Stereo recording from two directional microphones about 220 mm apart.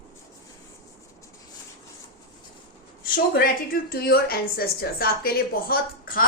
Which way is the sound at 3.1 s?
45° left (ahead or behind).